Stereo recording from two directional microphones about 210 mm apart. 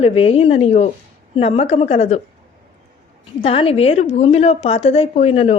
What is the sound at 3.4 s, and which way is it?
Speech, 25° left (ahead or behind).